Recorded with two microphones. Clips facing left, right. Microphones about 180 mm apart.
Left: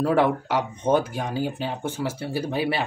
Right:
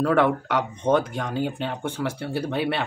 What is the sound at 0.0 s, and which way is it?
Speech, 5° left (ahead or behind).